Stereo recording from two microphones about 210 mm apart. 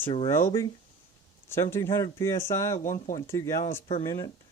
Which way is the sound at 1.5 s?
10° left (ahead or behind).